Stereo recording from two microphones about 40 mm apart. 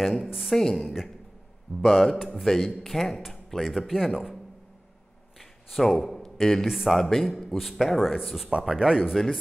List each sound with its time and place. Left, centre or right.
0.0 s a man's voice: centre
2.4 s a man's voice: centre
5.4 s a sound: centre
6.3 s a man's voice: centre
9.1 s a man's voice: centre